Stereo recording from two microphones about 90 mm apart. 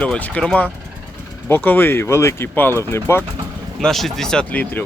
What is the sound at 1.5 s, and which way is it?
Speech, 25° left (ahead or behind).